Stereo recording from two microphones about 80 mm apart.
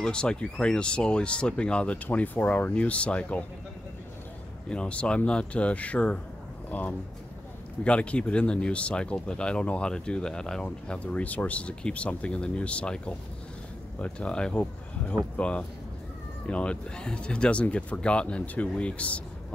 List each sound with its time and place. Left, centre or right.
0.0 s speech: centre
4.6 s speech: centre